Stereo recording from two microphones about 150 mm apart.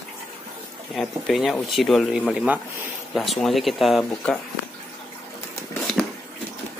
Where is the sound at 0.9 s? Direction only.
Centre (ahead or behind).